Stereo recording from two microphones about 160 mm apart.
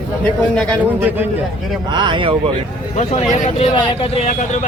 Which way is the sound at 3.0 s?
45° left (ahead or behind).